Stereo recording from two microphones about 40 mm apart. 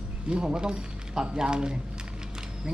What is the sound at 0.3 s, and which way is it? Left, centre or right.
Speech, right.